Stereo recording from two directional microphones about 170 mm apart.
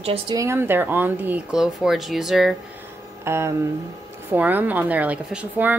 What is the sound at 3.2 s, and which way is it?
A woman's voice, 15° right (ahead or behind).